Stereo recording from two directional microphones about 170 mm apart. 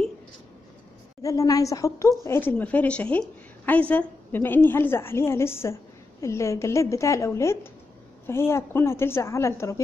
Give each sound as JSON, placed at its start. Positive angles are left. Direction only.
{"t": 1.2, "sound": "a woman's voice", "side_deg": 20}